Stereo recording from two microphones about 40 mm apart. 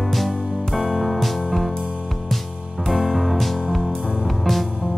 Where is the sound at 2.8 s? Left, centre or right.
Centre.